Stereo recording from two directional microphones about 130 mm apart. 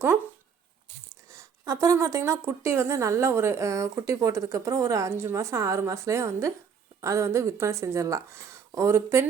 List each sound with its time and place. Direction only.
1.1 s speech: 25° right (ahead or behind)